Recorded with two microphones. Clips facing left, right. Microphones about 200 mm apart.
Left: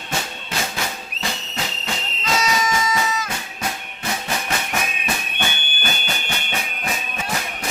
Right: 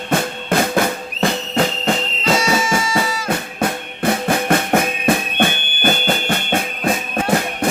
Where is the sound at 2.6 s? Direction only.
30° right (ahead or behind).